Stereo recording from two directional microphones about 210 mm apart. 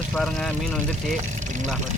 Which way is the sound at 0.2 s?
5° left (ahead or behind).